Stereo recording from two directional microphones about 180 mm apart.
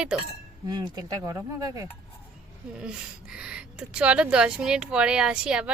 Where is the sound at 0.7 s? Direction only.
20° right (ahead or behind).